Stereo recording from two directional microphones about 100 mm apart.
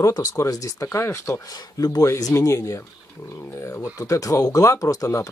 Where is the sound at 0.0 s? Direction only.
40° left (ahead or behind).